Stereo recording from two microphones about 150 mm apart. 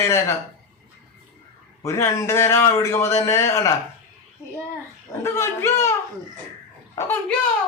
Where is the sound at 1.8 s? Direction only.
20° left (ahead or behind).